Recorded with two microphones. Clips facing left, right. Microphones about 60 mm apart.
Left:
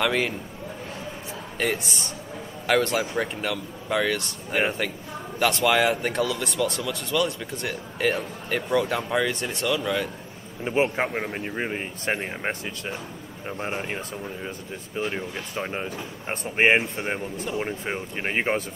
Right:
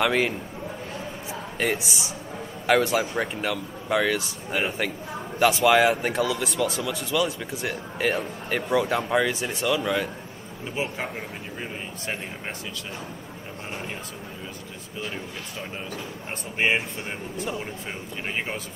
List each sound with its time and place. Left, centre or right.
0.0 s speech: centre
1.6 s speech: centre
10.6 s speech: left
13.6 s speech: left
15.0 s speech: left